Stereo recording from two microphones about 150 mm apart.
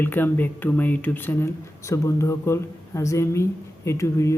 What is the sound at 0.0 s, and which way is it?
Speech, 15° left (ahead or behind).